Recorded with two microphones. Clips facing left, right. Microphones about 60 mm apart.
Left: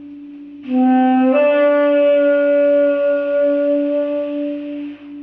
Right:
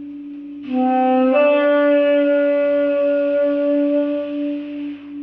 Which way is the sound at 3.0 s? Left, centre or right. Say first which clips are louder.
Left 1 dB; left.